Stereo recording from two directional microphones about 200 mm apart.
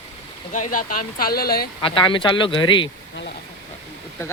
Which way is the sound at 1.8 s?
25° left (ahead or behind).